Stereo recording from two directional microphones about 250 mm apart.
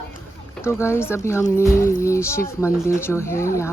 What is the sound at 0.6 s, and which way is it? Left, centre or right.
Speech, centre.